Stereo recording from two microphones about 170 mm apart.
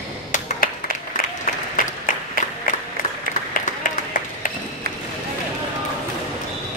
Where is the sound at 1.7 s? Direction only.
50° left (ahead or behind).